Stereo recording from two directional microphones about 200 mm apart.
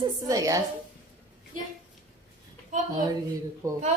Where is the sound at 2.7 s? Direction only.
40° right (ahead or behind).